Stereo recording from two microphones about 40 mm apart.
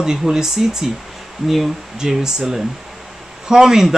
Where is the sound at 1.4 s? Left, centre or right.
Centre.